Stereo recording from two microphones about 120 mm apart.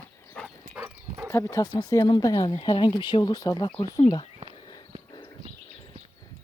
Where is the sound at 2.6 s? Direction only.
45° left (ahead or behind).